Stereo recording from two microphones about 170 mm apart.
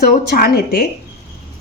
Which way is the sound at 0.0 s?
60° left (ahead or behind).